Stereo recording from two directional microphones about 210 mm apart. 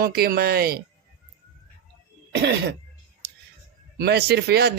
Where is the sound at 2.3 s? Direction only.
55° right (ahead or behind).